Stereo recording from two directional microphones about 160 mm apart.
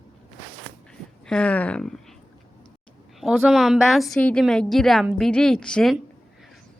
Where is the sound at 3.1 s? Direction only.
Centre (ahead or behind).